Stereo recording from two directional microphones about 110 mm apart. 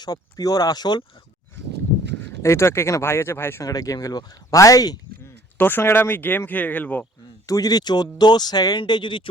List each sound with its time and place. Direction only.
0.0 s speech: 35° left (ahead or behind)
2.4 s speech: 25° left (ahead or behind)
3.7 s speech: 35° left (ahead or behind)
5.5 s speech: 20° left (ahead or behind)
7.4 s speech: 35° left (ahead or behind)